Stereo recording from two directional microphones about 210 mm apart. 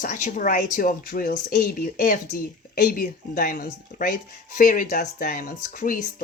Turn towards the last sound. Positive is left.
turn(degrees=40)  # may be behind; listen again after turning